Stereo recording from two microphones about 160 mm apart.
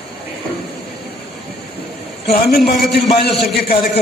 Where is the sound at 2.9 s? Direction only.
90° left.